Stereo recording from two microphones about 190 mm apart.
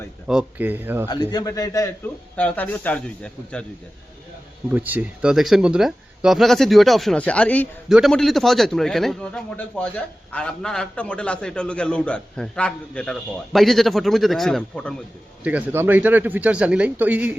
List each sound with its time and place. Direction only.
0.3 s a man's voice: 5° right (ahead or behind)
1.3 s a man's voice: 20° left (ahead or behind)
2.3 s a man's voice: 10° left (ahead or behind)
4.7 s a man's voice: 10° right (ahead or behind)
15.4 s a man's voice: 10° right (ahead or behind)